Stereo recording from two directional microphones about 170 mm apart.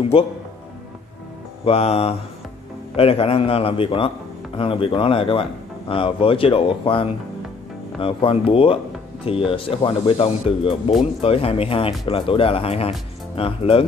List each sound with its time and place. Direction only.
1.6 s speech: 35° left (ahead or behind)